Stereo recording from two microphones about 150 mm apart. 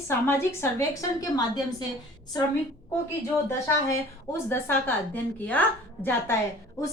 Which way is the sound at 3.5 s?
20° left (ahead or behind).